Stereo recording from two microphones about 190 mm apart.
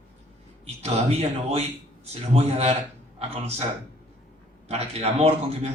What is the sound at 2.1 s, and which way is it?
A man's voice, 35° right (ahead or behind).